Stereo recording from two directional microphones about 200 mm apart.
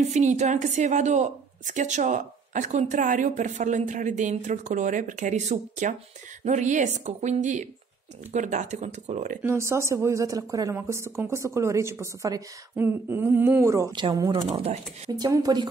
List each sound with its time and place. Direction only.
0.1 s a woman's voice: 35° right (ahead or behind)
9.4 s speech: 15° right (ahead or behind)